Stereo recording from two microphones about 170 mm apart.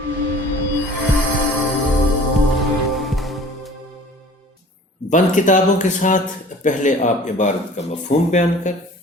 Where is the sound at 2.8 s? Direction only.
Centre (ahead or behind).